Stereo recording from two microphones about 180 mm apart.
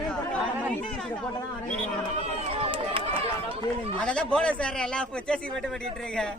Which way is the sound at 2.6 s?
30° right (ahead or behind).